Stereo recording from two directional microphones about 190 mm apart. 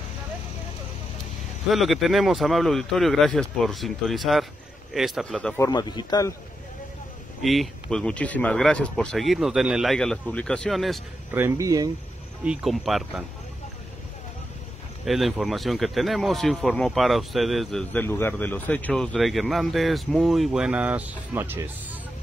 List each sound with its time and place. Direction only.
1.7 s speech: centre (ahead or behind)
5.6 s speech: 20° left (ahead or behind)
7.4 s speech: centre (ahead or behind)
11.3 s speech: 15° right (ahead or behind)
12.4 s speech: centre (ahead or behind)
15.0 s speech: centre (ahead or behind)